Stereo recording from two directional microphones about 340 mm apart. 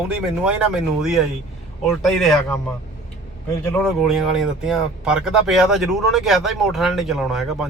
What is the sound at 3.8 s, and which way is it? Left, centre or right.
Speech, centre.